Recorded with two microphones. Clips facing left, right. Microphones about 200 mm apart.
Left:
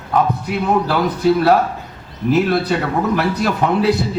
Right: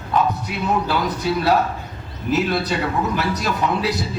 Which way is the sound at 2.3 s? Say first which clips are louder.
Left 5 dB; 55° left (ahead or behind).